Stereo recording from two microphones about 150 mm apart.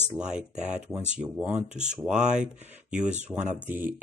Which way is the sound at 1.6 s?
50° right (ahead or behind).